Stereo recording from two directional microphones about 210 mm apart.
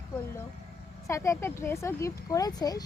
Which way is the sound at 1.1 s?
15° left (ahead or behind).